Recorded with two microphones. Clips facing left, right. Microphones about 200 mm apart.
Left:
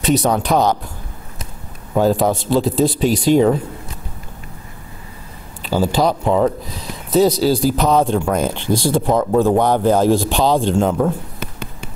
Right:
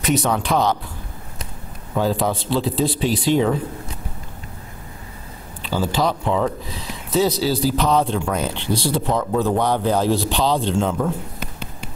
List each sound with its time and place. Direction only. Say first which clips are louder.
0.0 s speech: left 4 dB; 35° left (ahead or behind)
2.0 s a man's voice: left 5 dB; 45° left (ahead or behind)
5.6 s a man's voice: left 4 dB; 45° left (ahead or behind)